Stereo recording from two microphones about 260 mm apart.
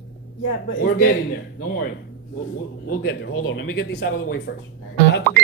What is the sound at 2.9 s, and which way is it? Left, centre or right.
Speech, left.